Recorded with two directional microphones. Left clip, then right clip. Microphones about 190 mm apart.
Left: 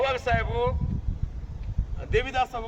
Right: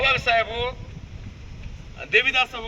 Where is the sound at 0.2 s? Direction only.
15° left (ahead or behind).